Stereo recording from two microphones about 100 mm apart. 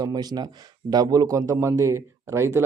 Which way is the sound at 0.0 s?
45° right (ahead or behind).